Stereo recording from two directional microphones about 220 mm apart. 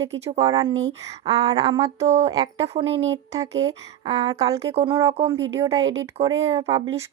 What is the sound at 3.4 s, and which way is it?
A woman's voice, 15° right (ahead or behind).